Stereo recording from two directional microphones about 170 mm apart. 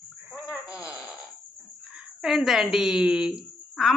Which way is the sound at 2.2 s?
Centre (ahead or behind).